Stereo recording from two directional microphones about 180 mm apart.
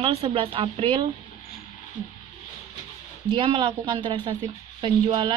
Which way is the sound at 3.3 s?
30° right (ahead or behind).